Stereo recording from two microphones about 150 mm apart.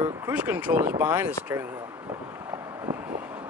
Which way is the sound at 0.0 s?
20° right (ahead or behind).